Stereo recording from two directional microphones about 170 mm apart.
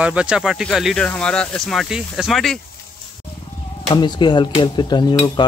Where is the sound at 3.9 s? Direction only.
25° left (ahead or behind).